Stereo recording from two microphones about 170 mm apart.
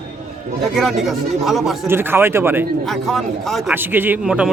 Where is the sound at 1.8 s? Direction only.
15° right (ahead or behind).